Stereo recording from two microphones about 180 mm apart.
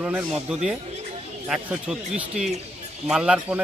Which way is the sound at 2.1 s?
5° right (ahead or behind).